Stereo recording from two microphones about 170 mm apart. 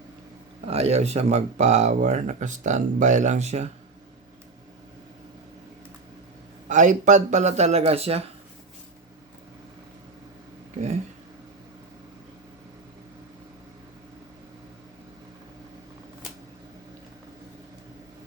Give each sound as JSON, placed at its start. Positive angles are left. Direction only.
{"t": 0.6, "sound": "speech", "side_deg": -40}
{"t": 6.7, "sound": "speech", "side_deg": -45}